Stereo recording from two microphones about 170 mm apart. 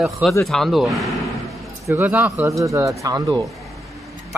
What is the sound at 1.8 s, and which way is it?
Speech, 10° right (ahead or behind).